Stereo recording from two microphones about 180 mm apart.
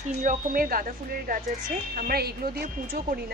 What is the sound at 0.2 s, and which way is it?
Speech, 50° right (ahead or behind).